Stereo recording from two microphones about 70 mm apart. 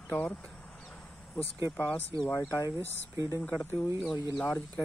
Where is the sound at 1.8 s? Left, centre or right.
Left.